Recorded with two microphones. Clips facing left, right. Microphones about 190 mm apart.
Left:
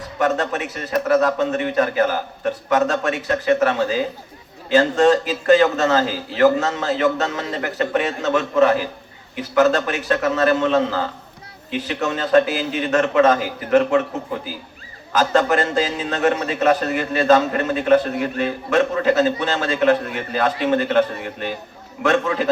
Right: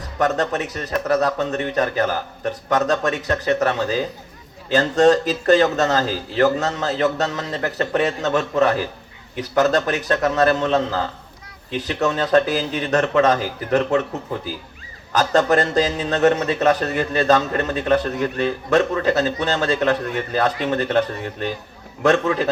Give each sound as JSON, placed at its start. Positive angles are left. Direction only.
{"t": 0.2, "sound": "a man's voice", "side_deg": -40}
{"t": 15.1, "sound": "a man's voice", "side_deg": -40}
{"t": 22.0, "sound": "a man's voice", "side_deg": -40}